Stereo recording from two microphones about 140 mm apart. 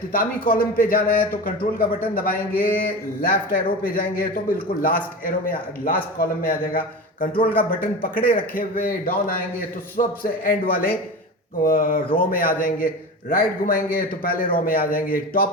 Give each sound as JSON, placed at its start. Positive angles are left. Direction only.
{"t": 0.1, "sound": "a man's voice", "side_deg": 90}
{"t": 2.1, "sound": "speech", "side_deg": 80}
{"t": 2.6, "sound": "a man's voice", "side_deg": 90}